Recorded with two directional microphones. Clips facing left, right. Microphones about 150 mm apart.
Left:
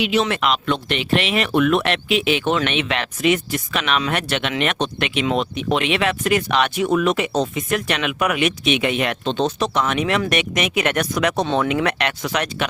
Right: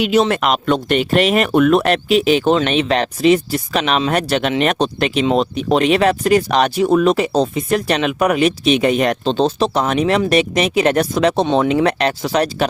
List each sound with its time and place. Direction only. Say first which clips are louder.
0.0 s speech: right 5 dB; 40° right (ahead or behind)